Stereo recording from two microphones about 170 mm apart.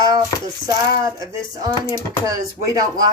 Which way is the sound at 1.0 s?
20° right (ahead or behind).